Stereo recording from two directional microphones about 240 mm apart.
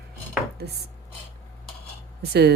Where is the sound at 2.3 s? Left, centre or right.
Right.